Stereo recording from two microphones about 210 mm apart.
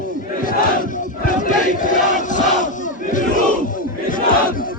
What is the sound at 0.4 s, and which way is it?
Battle cry, 40° left (ahead or behind).